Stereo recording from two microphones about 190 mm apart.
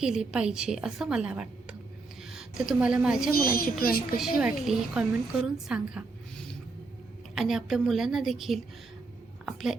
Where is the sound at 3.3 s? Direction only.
50° left (ahead or behind).